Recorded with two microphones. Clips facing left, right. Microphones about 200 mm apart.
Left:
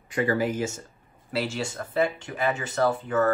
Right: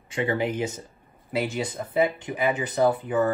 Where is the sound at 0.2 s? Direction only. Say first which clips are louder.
Left 1 dB; 25° right (ahead or behind).